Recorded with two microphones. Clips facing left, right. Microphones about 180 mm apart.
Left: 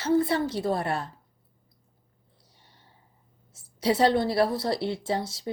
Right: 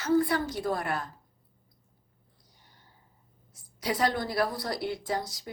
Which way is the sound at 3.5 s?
30° left (ahead or behind).